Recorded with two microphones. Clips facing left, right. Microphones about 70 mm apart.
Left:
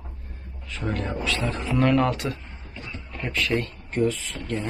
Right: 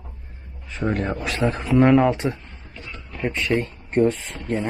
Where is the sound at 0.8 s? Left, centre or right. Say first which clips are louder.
Right 4 dB; right.